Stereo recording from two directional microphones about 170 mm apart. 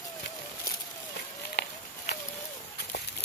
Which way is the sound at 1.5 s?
75° left (ahead or behind).